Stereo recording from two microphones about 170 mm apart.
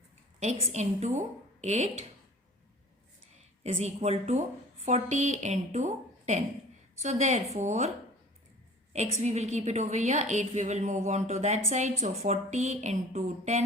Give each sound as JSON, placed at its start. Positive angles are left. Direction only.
{"t": 0.3, "sound": "a woman's voice", "side_deg": -40}
{"t": 3.6, "sound": "a woman's voice", "side_deg": -40}
{"t": 9.2, "sound": "a woman's voice", "side_deg": -40}